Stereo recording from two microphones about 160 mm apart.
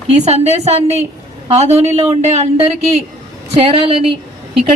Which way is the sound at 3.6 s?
35° right (ahead or behind).